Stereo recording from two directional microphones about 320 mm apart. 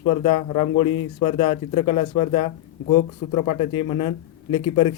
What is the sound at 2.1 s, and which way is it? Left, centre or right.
Speech, left.